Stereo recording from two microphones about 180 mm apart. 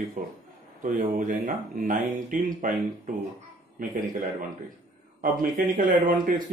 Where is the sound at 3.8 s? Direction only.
50° right (ahead or behind).